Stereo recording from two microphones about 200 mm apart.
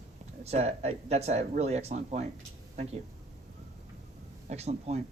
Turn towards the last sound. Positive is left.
turn(degrees=-35)  # may be behind; listen again after turning